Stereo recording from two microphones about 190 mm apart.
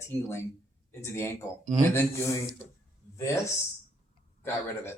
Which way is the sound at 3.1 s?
15° left (ahead or behind).